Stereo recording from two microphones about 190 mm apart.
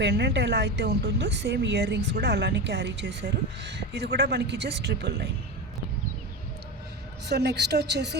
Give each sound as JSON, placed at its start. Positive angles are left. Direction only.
{"t": 0.0, "sound": "speech", "side_deg": -65}
{"t": 7.3, "sound": "speech", "side_deg": -60}